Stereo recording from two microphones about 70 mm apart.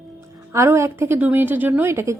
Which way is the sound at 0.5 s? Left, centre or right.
Right.